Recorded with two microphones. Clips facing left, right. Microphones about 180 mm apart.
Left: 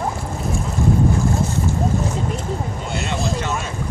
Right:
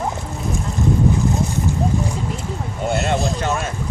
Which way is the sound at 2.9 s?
55° right (ahead or behind).